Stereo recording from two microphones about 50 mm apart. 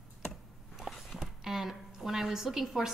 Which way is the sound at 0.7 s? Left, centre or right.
Centre.